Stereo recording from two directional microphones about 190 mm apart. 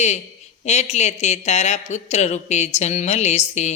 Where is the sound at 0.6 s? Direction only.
35° left (ahead or behind).